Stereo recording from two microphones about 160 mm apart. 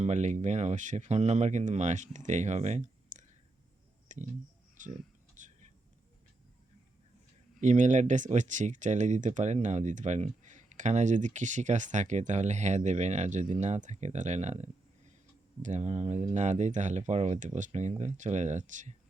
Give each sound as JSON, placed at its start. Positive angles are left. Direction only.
{"t": 0.0, "sound": "speech", "side_deg": -45}
{"t": 4.1, "sound": "a sound", "side_deg": -50}
{"t": 7.6, "sound": "speech", "side_deg": -50}